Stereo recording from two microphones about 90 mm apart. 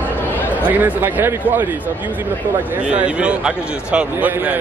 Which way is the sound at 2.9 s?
10° right (ahead or behind).